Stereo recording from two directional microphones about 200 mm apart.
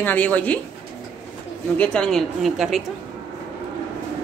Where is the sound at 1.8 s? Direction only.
5° left (ahead or behind).